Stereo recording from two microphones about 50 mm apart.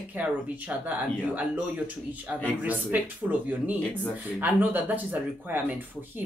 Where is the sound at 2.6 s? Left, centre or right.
Right.